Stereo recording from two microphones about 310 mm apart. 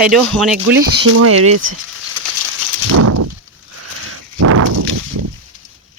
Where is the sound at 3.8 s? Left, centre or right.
Right.